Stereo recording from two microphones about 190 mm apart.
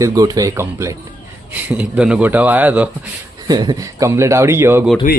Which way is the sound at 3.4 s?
20° right (ahead or behind).